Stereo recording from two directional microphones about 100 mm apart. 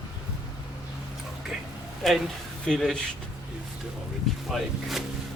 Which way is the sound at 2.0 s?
Centre (ahead or behind).